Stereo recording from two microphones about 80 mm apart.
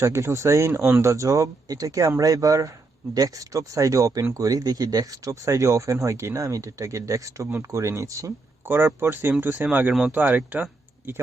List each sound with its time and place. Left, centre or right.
0.0 s speech: right
8.6 s speech: right